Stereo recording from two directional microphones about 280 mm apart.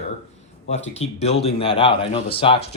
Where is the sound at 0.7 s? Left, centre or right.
Left.